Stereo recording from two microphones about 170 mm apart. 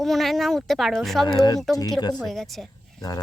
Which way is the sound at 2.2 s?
Centre (ahead or behind).